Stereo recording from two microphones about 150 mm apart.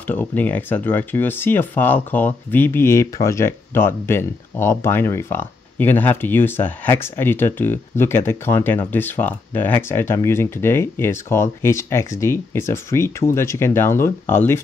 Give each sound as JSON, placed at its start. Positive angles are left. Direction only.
{"t": 0.0, "sound": "speech", "side_deg": 10}